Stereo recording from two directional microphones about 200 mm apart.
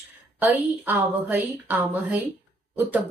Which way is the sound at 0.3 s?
10° right (ahead or behind).